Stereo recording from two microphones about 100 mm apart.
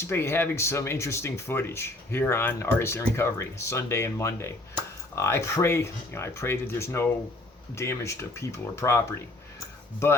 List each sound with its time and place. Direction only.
0.0 s speech: 25° left (ahead or behind)